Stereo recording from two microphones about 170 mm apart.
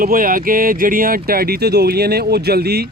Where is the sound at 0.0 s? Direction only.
55° right (ahead or behind).